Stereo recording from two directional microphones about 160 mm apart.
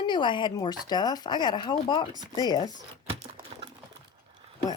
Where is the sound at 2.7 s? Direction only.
35° right (ahead or behind).